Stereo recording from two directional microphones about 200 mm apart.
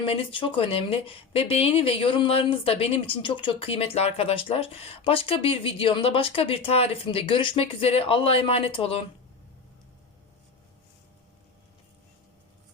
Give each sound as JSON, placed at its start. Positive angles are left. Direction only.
{"t": 0.0, "sound": "speech", "side_deg": 25}